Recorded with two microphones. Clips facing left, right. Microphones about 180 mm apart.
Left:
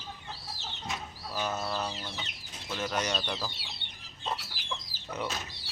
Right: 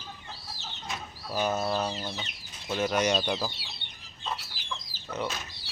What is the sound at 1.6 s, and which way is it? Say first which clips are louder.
Speech: right 5 dB; 20° right (ahead or behind).